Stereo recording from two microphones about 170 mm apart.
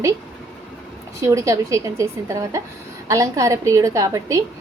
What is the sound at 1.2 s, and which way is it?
A woman's voice, 20° right (ahead or behind).